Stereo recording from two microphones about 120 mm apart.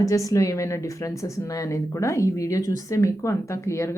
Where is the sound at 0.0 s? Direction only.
30° left (ahead or behind).